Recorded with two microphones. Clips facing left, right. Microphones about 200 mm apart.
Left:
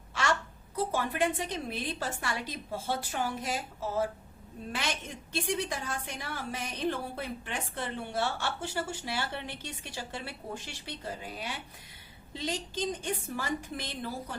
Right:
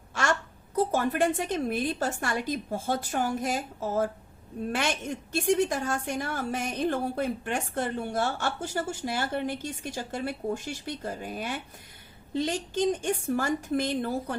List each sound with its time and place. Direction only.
0.1 s a sound: 45° right (ahead or behind)
0.8 s a woman's voice: 45° right (ahead or behind)
5.3 s a woman's voice: 45° right (ahead or behind)